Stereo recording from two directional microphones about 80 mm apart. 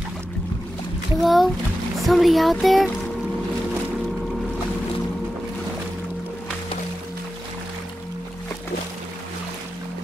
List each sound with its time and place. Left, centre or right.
1.2 s speech: centre